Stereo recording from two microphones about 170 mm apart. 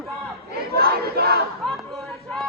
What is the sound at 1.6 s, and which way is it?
Chatter, 5° left (ahead or behind).